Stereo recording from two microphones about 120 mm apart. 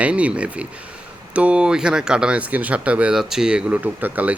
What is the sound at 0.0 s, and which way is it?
Speech, 10° right (ahead or behind).